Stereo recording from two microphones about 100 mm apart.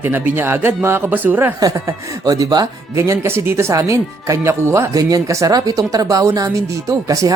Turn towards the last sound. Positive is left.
turn(degrees=-35)  # may be behind; listen again after turning